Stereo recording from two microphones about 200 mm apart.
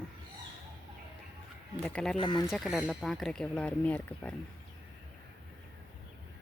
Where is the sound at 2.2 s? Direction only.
20° left (ahead or behind).